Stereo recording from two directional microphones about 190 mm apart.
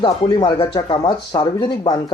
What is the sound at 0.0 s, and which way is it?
Speech, 25° left (ahead or behind).